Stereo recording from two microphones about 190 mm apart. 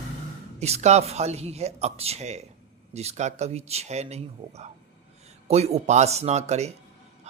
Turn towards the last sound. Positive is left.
turn(degrees=-35)  # may be behind; listen again after turning